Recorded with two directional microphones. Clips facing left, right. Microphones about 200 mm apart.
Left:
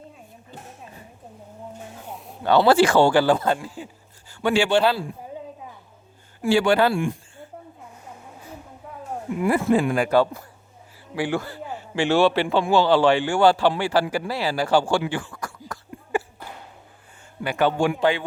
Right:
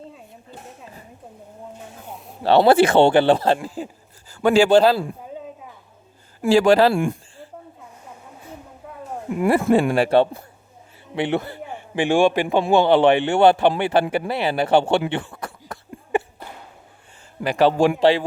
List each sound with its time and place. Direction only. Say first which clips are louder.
2.0 s a sound: even; centre (ahead or behind)
2.4 s speech: right 3 dB; 35° right (ahead or behind)
2.8 s a man's voice: right 3 dB; 25° right (ahead or behind); by 4.9 s 40° right (ahead or behind)
6.5 s speech: right 4 dB; 35° right (ahead or behind)
9.6 s speech: right 2 dB; 50° right (ahead or behind)
10.0 s a man's voice: right 3 dB; 25° right (ahead or behind)
15.1 s cough: right 2 dB; 25° right (ahead or behind)
17.4 s speech: right 4 dB; 35° right (ahead or behind)